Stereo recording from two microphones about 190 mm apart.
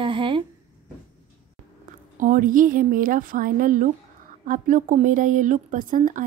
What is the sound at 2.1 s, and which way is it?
A woman's voice, 45° right (ahead or behind).